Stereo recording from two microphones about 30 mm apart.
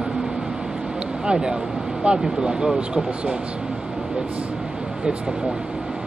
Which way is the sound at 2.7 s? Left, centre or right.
Right.